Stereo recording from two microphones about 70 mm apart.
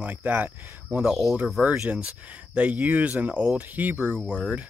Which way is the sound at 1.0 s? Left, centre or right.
Centre.